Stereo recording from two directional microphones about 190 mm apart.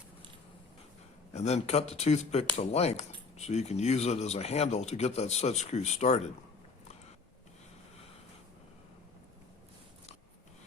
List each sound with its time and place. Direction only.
1.3 s speech: 35° left (ahead or behind)